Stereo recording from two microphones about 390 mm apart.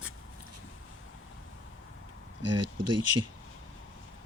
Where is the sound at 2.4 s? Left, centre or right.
Right.